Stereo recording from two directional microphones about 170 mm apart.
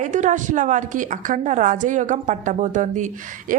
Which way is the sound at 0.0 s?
45° right (ahead or behind).